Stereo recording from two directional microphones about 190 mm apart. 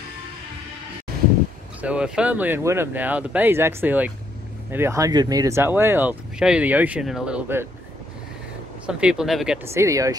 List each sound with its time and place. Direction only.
1.8 s speech: 5° right (ahead or behind)
8.8 s speech: 5° right (ahead or behind)
9.8 s speech: 15° right (ahead or behind)